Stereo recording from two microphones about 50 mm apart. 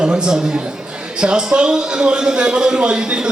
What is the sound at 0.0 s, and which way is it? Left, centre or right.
A man's voice, centre.